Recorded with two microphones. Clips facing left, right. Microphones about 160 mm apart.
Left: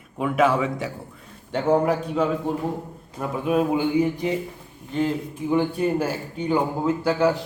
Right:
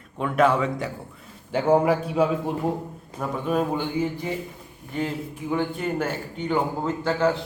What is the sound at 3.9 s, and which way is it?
Speech, 15° left (ahead or behind).